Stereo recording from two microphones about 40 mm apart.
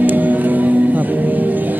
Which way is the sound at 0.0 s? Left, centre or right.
Right.